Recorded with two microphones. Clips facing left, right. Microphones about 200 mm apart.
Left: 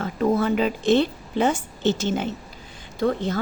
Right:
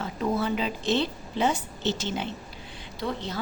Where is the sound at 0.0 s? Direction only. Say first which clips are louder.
Left 6 dB; 50° left (ahead or behind).